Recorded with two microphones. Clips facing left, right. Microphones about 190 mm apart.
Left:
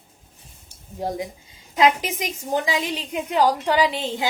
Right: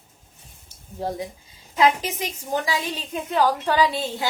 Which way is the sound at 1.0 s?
15° left (ahead or behind).